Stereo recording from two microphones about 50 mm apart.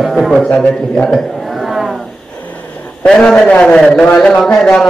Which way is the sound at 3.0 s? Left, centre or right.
Left.